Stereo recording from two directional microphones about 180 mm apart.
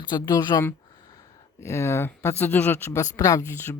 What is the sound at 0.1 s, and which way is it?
Speech, 20° left (ahead or behind).